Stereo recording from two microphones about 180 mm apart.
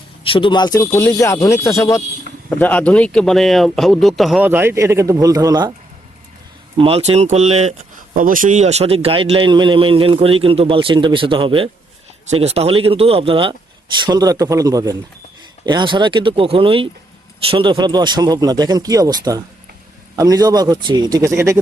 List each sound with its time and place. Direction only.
0.3 s speech: 30° left (ahead or behind)
2.5 s speech: 10° left (ahead or behind); by 5.7 s 20° right (ahead or behind)
6.7 s speech: 30° right (ahead or behind); by 21.6 s 15° right (ahead or behind)